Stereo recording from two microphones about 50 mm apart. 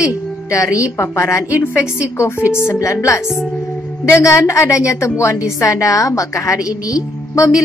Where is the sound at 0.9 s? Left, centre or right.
Left.